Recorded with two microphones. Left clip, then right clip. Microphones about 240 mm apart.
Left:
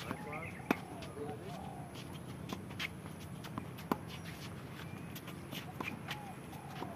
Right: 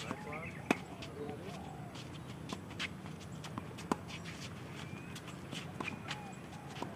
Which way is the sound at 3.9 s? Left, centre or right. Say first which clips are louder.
Even; centre.